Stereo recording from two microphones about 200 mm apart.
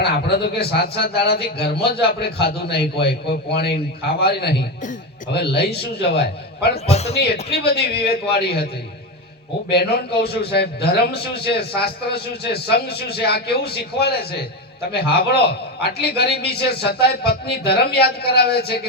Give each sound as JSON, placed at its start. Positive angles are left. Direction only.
{"t": 0.0, "sound": "a man's voice", "side_deg": 55}
{"t": 6.7, "sound": "a man's voice", "side_deg": 30}
{"t": 7.1, "sound": "a man's voice", "side_deg": 55}